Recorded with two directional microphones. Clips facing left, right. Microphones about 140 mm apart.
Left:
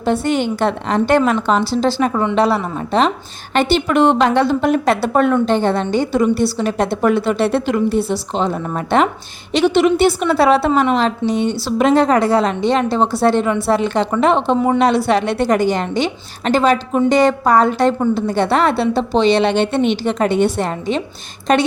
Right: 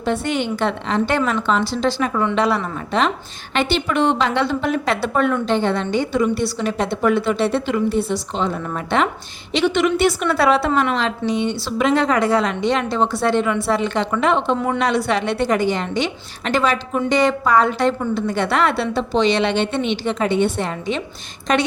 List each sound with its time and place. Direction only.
0.0 s a woman's voice: 35° left (ahead or behind)
14.5 s a woman's voice: 20° left (ahead or behind)
14.8 s a woman's voice: 35° left (ahead or behind)